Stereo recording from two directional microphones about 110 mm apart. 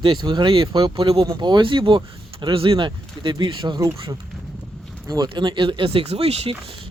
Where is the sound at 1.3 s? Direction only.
40° right (ahead or behind).